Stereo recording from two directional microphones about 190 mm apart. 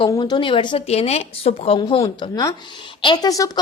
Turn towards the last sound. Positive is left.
turn(degrees=20)  # may be behind; listen again after turning